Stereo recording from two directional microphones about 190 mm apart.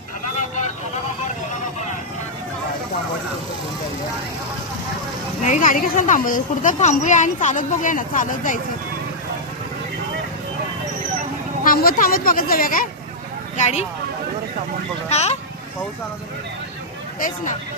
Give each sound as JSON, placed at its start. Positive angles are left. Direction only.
{"t": 5.4, "sound": "speech", "side_deg": 40}
{"t": 11.6, "sound": "speech", "side_deg": 50}
{"t": 13.6, "sound": "speech", "side_deg": 35}
{"t": 15.1, "sound": "speech", "side_deg": 35}
{"t": 17.2, "sound": "speech", "side_deg": 45}